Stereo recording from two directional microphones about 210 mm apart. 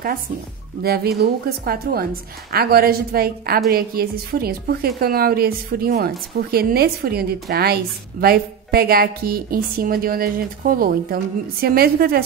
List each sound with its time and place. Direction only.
0.8 s a woman's voice: 50° right (ahead or behind)